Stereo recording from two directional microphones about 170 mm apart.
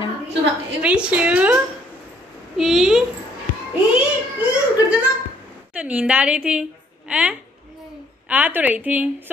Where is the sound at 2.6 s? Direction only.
Centre (ahead or behind).